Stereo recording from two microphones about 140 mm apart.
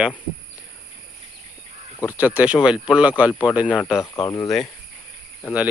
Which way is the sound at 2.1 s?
10° right (ahead or behind).